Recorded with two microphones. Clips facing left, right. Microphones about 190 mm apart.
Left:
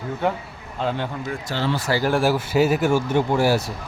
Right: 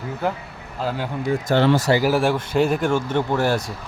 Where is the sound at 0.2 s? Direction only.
Centre (ahead or behind).